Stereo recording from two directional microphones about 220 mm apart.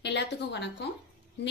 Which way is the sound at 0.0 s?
50° left (ahead or behind).